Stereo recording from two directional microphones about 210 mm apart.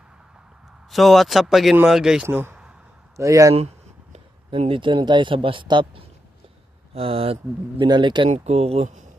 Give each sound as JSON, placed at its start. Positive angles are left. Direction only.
{"t": 0.9, "sound": "speech", "side_deg": 0}
{"t": 4.1, "sound": "speech", "side_deg": -30}